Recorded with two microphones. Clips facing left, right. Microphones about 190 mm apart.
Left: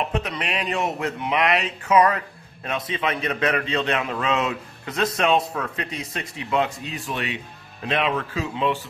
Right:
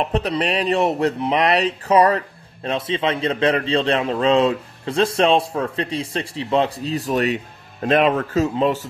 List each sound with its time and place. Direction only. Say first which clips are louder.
0.0 s speech: right 6 dB; 35° right (ahead or behind)